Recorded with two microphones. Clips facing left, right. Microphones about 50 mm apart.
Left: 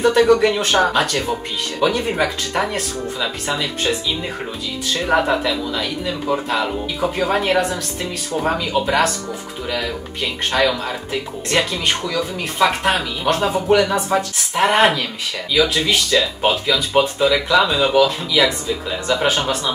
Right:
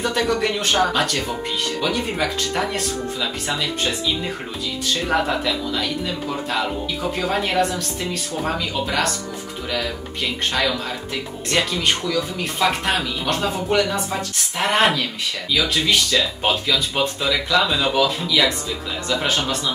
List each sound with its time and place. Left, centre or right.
0.0 s speech: centre
5.0 s speech: centre
7.2 s speech: centre
10.5 s speech: centre
13.7 s speech: left
14.5 s speech: centre
19.0 s speech: centre